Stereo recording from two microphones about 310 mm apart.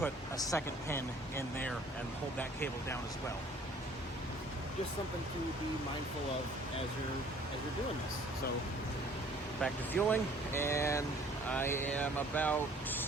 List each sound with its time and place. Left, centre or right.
0.0 s speech: centre
9.6 s speech: centre